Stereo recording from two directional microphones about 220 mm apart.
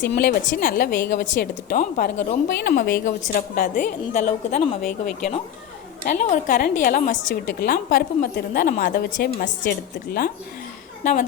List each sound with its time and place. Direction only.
0.2 s a woman's voice: 40° left (ahead or behind)